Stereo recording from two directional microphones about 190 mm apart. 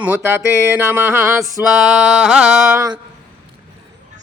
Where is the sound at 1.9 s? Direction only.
5° right (ahead or behind).